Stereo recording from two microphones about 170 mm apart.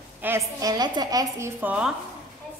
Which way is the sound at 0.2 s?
15° right (ahead or behind).